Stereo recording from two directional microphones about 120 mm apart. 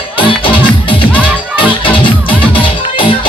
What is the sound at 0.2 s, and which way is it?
Music, 45° left (ahead or behind).